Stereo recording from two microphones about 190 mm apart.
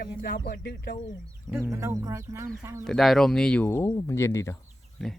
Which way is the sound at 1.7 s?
15° right (ahead or behind).